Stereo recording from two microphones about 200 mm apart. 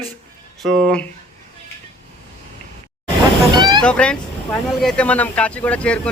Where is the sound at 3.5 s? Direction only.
20° right (ahead or behind).